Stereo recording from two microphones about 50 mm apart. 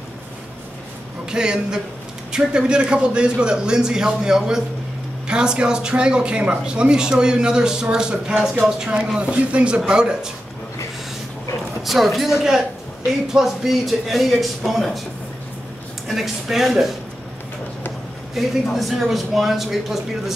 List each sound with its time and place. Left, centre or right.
1.3 s speech: centre
11.8 s a man's voice: centre
16.1 s a man's voice: centre
18.3 s a man's voice: centre